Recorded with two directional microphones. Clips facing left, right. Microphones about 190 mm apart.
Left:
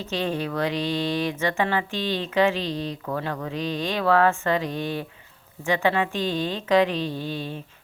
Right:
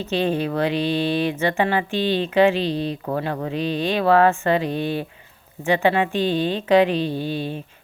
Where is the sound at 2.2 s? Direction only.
15° right (ahead or behind).